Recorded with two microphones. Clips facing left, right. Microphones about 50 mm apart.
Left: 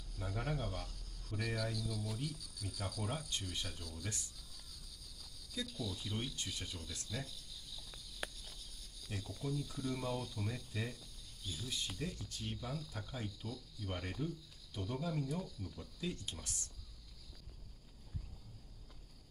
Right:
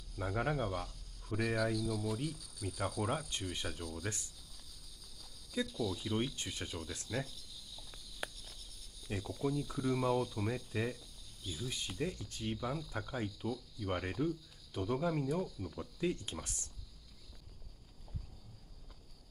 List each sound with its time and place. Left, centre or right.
0.2 s speech: right
1.4 s speech: centre
3.0 s speech: right
5.6 s speech: right
7.8 s cricket: centre
9.4 s speech: right